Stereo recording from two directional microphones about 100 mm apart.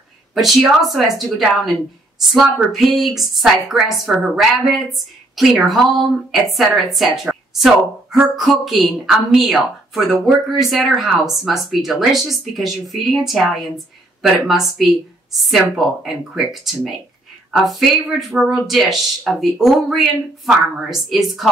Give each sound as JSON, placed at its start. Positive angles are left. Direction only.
{"t": 0.3, "sound": "speech", "side_deg": 0}